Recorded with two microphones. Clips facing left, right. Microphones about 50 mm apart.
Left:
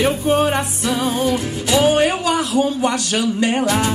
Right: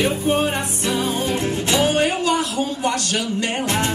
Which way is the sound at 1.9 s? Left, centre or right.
Left.